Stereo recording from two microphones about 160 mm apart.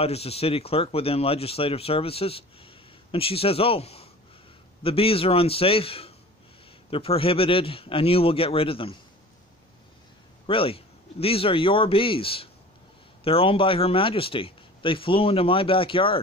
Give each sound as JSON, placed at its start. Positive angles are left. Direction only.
{"t": 0.0, "sound": "speech", "side_deg": 40}
{"t": 10.4, "sound": "speech", "side_deg": 35}